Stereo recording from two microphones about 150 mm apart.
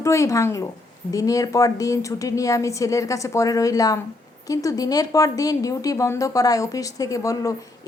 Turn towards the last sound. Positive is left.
turn(degrees=20)  # may be behind; listen again after turning